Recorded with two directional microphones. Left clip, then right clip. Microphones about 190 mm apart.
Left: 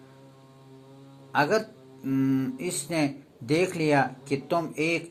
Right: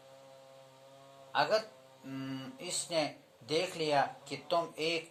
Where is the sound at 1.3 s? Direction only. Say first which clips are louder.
Left 6 dB; 15° left (ahead or behind).